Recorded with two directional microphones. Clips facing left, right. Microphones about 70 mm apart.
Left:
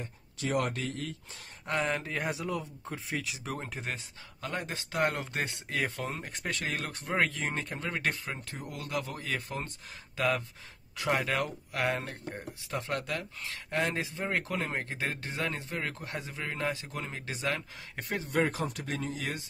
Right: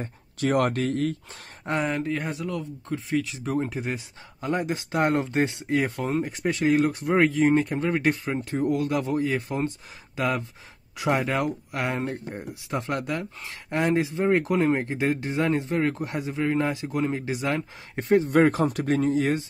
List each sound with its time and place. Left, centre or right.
0.4 s speech: right
1.8 s speech: centre
2.3 s speech: centre
4.4 s speech: right
6.2 s speech: centre
7.8 s speech: centre
18.3 s speech: right